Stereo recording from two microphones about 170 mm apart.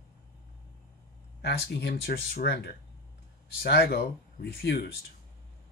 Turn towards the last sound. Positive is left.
turn(degrees=70)  # may be behind; listen again after turning